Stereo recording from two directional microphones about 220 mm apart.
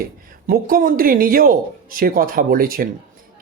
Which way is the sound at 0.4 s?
40° right (ahead or behind).